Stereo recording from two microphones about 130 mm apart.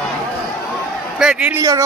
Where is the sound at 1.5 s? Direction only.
25° right (ahead or behind).